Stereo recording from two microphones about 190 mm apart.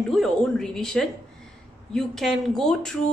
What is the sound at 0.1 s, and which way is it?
A woman's voice, centre (ahead or behind).